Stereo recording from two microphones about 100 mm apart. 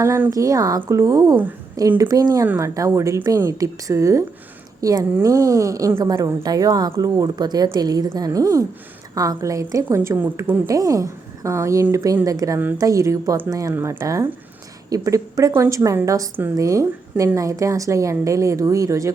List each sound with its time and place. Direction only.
0.3 s speech: 35° right (ahead or behind)
10.7 s speech: 35° right (ahead or behind)
13.7 s speech: 25° right (ahead or behind)
14.8 s speech: 35° right (ahead or behind)